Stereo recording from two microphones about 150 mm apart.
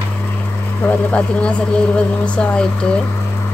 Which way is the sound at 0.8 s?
10° left (ahead or behind).